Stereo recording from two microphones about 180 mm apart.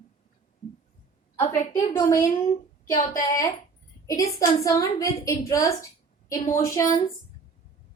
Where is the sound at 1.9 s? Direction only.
15° left (ahead or behind).